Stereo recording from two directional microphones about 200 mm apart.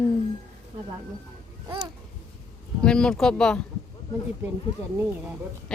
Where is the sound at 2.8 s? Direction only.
5° left (ahead or behind).